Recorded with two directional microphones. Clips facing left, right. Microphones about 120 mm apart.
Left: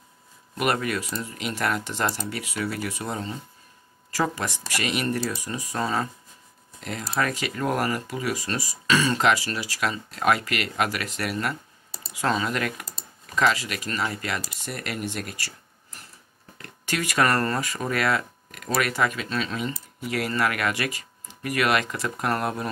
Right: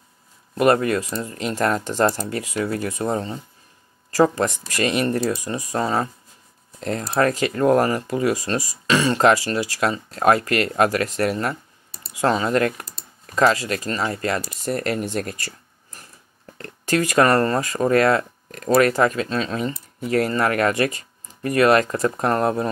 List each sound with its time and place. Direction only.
0.6 s speech: 30° right (ahead or behind)
1.5 s speech: 40° right (ahead or behind)
2.5 s speech: 25° right (ahead or behind)